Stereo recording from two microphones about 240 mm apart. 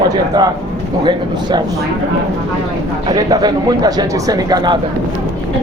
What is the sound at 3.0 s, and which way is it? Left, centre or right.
Speech, centre.